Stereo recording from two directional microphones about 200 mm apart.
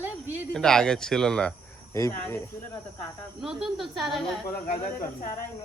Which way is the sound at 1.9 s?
15° left (ahead or behind).